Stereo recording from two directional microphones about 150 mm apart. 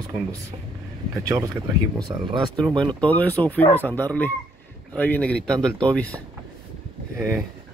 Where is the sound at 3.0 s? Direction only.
10° left (ahead or behind).